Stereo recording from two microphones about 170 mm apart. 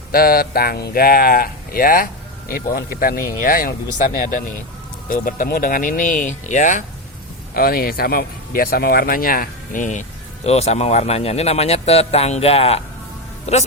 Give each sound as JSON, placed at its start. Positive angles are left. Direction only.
{"t": 0.1, "sound": "speech", "side_deg": 60}
{"t": 7.5, "sound": "speech", "side_deg": 60}